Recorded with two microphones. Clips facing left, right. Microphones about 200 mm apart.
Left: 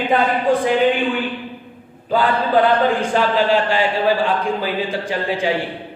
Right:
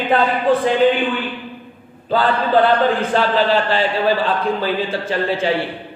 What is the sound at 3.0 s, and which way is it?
A man's voice, 10° left (ahead or behind).